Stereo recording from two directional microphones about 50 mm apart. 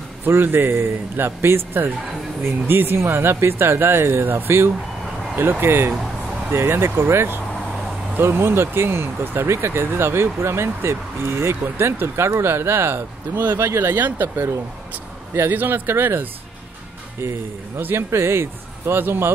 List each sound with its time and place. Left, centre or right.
0.2 s speech: right
14.0 s speech: right
15.5 s speech: right
17.7 s speech: right